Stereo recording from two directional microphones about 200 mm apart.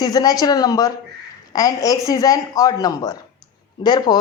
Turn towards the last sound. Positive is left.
turn(degrees=20)  # may be behind; listen again after turning